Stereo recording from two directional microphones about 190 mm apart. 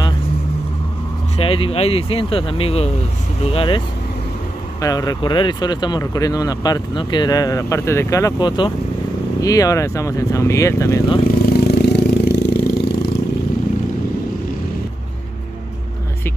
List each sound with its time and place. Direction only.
1.4 s speech: 30° left (ahead or behind)
4.8 s speech: 20° left (ahead or behind)
11.2 s vehicle: 55° left (ahead or behind)